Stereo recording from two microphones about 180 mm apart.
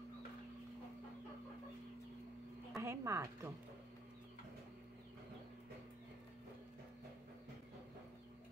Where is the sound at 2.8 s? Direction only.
15° right (ahead or behind).